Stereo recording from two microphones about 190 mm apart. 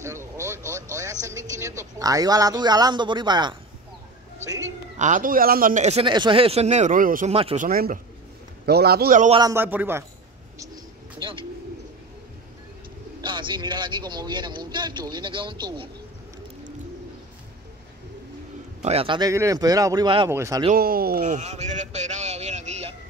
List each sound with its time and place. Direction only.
0.0 s a woman's voice: 15° right (ahead or behind)
4.9 s a man's voice: 40° right (ahead or behind)
7.3 s a woman's voice: 30° right (ahead or behind)
7.6 s a man's voice: 45° right (ahead or behind)
9.3 s speech: 20° right (ahead or behind)
11.1 s bird: 25° right (ahead or behind)
13.2 s a woman's voice: 25° right (ahead or behind)
18.8 s a woman's voice: 35° right (ahead or behind)
20.2 s speech: 15° right (ahead or behind)
20.7 s a man's voice: 50° right (ahead or behind); by 22.9 s 35° right (ahead or behind)